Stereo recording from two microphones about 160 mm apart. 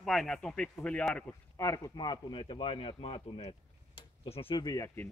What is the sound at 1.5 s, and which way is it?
A man's voice, 20° left (ahead or behind).